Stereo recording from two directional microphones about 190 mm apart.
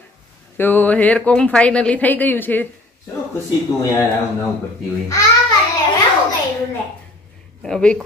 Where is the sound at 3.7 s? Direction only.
20° left (ahead or behind).